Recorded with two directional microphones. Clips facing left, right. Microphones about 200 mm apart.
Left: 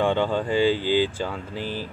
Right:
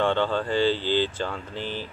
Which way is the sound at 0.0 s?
10° left (ahead or behind).